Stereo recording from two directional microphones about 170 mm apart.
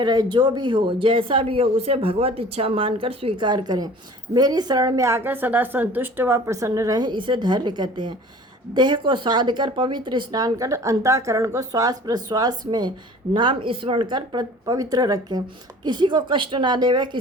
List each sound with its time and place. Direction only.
0.0 s speech: 25° right (ahead or behind)